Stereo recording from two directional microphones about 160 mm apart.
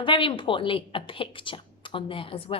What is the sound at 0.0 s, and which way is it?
A woman's voice, 30° left (ahead or behind).